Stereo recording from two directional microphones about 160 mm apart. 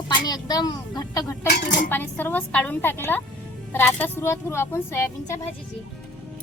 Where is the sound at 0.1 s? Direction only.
25° left (ahead or behind).